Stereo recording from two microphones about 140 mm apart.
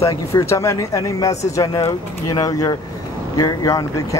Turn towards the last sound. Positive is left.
turn(degrees=25)  # may be behind; listen again after turning